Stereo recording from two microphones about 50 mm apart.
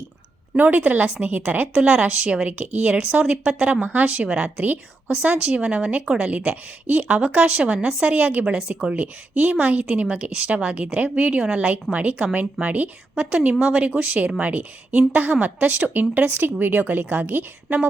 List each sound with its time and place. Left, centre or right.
0.5 s a woman's voice: right